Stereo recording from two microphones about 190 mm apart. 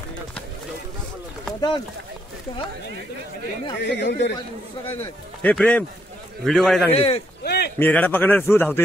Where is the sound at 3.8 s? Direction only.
65° left (ahead or behind).